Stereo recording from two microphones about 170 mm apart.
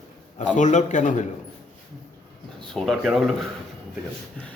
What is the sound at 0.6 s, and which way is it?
Speech, 45° left (ahead or behind).